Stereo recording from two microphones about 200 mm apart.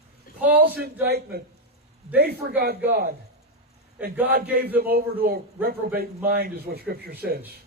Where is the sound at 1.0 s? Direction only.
50° right (ahead or behind).